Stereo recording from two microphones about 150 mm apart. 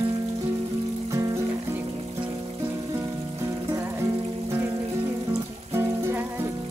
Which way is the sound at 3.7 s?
15° right (ahead or behind).